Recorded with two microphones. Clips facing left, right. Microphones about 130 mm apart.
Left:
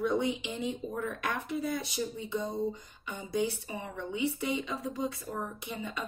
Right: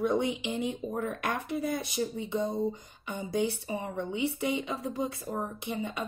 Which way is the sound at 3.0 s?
55° right (ahead or behind).